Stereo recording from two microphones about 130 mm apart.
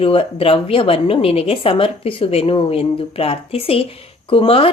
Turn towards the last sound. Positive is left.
turn(degrees=45)  # may be behind; listen again after turning